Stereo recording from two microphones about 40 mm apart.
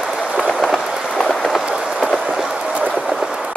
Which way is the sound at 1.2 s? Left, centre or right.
Centre.